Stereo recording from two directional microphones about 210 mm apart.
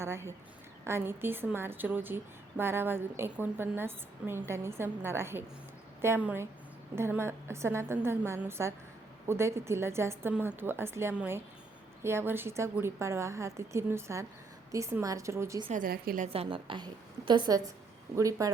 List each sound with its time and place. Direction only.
0.0 s a woman's voice: 10° right (ahead or behind)
15.7 s a woman's voice: 45° right (ahead or behind); by 18.5 s 15° right (ahead or behind)